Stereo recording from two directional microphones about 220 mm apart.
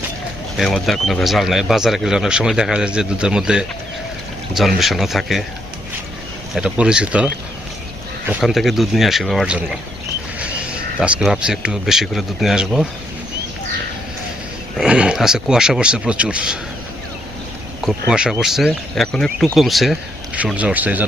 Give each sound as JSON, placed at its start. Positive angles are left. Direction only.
{"t": 0.5, "sound": "speech", "side_deg": 0}
{"t": 6.5, "sound": "speech", "side_deg": -5}
{"t": 8.3, "sound": "speech", "side_deg": 0}
{"t": 11.0, "sound": "speech", "side_deg": -5}
{"t": 14.8, "sound": "speech", "side_deg": -5}
{"t": 17.8, "sound": "speech", "side_deg": -5}